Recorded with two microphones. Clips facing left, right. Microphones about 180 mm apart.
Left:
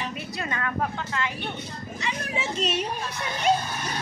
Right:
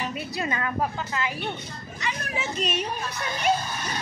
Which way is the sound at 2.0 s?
25° left (ahead or behind).